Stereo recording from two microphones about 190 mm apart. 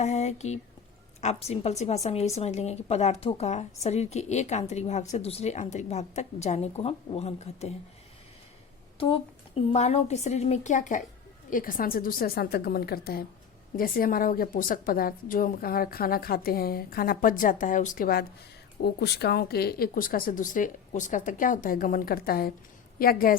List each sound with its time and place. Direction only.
0.0 s speech: 35° left (ahead or behind)
9.0 s a woman's voice: 30° left (ahead or behind); by 23.4 s 50° left (ahead or behind)